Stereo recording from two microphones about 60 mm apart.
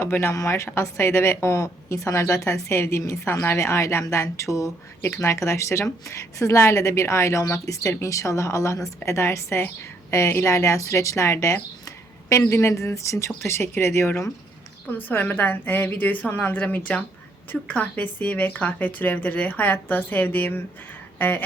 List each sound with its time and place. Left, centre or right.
0.0 s a woman's voice: left
0.3 s a woman's voice: left
14.8 s a woman's voice: left
21.2 s a sound: left